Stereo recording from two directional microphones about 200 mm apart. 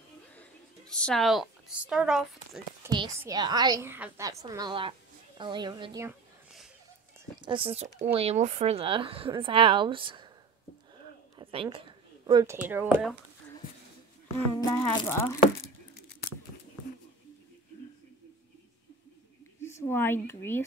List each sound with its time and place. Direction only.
0.4 s a sound: 5° left (ahead or behind)
2.8 s a woman's voice: 20° right (ahead or behind)
7.4 s a woman's voice: 25° right (ahead or behind)
11.3 s a sound: 25° right (ahead or behind)
12.5 s speech: 10° right (ahead or behind)
14.7 s speech: 20° left (ahead or behind)
19.6 s speech: 10° left (ahead or behind)